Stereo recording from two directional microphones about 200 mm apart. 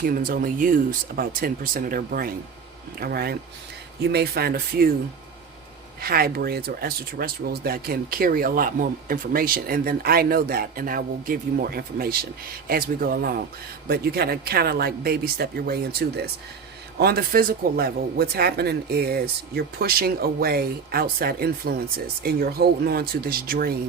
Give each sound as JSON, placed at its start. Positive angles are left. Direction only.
{"t": 0.0, "sound": "speech", "side_deg": -45}
{"t": 6.0, "sound": "speech", "side_deg": -50}